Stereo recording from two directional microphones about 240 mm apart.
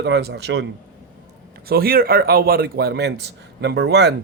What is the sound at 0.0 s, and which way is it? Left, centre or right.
Speech, right.